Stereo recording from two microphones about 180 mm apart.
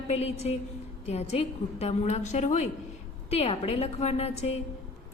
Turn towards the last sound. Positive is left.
turn(degrees=35)  # may be behind; listen again after turning